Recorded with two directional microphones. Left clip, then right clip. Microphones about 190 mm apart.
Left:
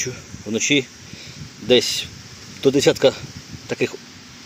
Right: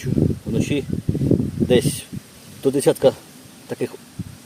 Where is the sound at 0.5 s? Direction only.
Centre (ahead or behind).